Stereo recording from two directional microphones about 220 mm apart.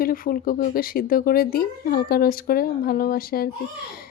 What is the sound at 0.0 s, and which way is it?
Speech, 40° left (ahead or behind).